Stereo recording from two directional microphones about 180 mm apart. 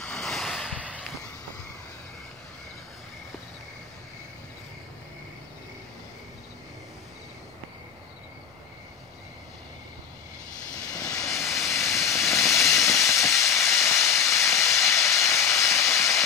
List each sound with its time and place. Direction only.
0.0 s a sound: 5° left (ahead or behind)
10.9 s vehicle: 20° left (ahead or behind)
11.2 s vehicle: centre (ahead or behind)
11.7 s vehicle: 15° left (ahead or behind)
13.1 s steam: 15° left (ahead or behind)
15.5 s vehicle: 15° left (ahead or behind)